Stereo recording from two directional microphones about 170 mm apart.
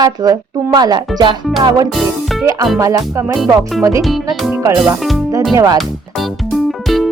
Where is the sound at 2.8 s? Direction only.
20° right (ahead or behind).